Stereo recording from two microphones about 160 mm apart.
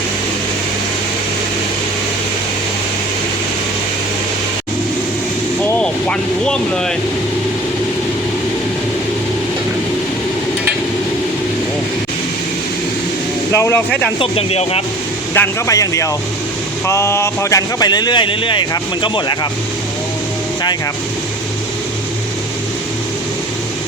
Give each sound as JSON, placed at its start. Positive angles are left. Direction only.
{"t": 5.6, "sound": "speech", "side_deg": 5}
{"t": 13.5, "sound": "speech", "side_deg": 15}
{"t": 14.2, "sound": "speech", "side_deg": 40}
{"t": 15.4, "sound": "speech", "side_deg": 20}